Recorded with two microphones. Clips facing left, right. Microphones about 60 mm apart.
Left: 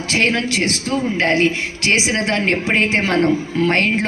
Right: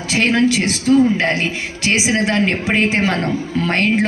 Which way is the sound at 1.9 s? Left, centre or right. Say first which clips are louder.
Right 1 dB; centre.